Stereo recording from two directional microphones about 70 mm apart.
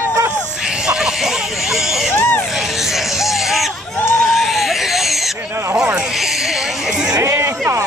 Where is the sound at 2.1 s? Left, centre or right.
Left.